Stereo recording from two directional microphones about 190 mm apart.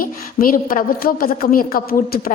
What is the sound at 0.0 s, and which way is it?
A woman's voice, 45° left (ahead or behind).